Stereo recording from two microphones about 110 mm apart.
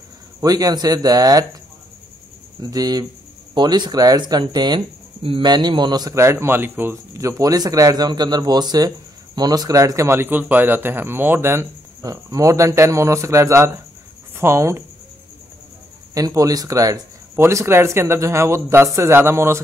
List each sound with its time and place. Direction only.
0.4 s speech: 35° right (ahead or behind)
2.6 s speech: 35° right (ahead or behind)
5.2 s speech: 55° right (ahead or behind)
5.5 s speech: 40° right (ahead or behind)
6.1 s speech: 25° right (ahead or behind)
16.2 s speech: 35° right (ahead or behind)